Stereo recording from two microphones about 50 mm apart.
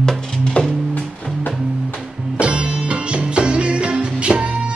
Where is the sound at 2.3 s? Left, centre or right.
Right.